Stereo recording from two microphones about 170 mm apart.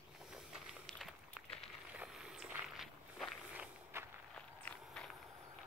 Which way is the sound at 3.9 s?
15° right (ahead or behind).